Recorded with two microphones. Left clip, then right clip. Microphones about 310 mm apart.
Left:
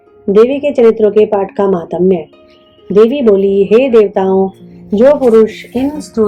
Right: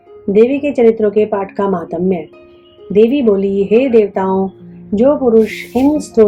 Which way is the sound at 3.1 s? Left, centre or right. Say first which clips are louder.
Left 4 dB; centre.